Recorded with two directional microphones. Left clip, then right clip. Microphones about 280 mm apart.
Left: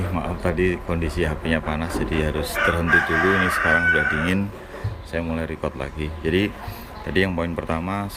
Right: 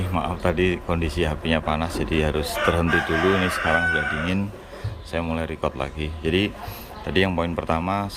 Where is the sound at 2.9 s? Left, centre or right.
Right.